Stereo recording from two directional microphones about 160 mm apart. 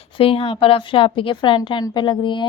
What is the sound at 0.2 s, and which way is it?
Speech, 35° left (ahead or behind).